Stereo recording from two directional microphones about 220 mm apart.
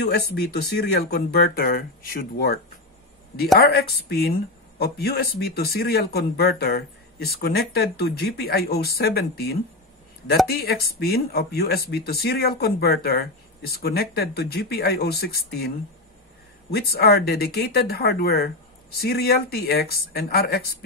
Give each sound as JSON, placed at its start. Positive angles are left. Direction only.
{"t": 0.0, "sound": "speech", "side_deg": 50}
{"t": 3.6, "sound": "speech", "side_deg": 45}
{"t": 16.7, "sound": "speech", "side_deg": 45}